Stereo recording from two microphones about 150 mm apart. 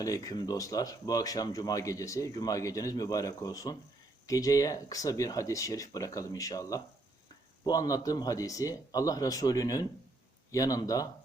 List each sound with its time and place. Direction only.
0.0 s speech: 25° left (ahead or behind)